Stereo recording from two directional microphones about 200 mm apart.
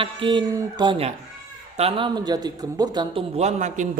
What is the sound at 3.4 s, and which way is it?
Speech, 35° right (ahead or behind).